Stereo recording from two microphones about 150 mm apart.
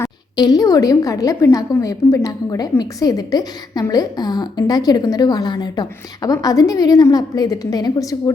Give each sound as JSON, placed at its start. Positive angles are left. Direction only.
{"t": 0.0, "sound": "a woman's voice", "side_deg": 25}